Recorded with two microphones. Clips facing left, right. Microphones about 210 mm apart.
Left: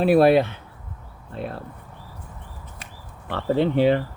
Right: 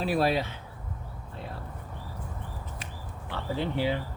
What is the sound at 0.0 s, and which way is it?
Speech, 60° left (ahead or behind).